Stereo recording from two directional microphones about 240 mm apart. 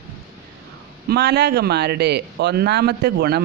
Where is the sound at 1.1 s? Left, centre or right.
Right.